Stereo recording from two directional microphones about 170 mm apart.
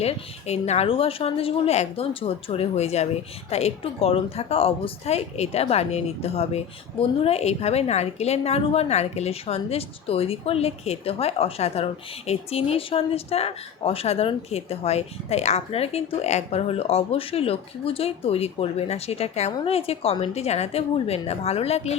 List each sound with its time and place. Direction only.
0.0 s a woman's voice: 40° left (ahead or behind)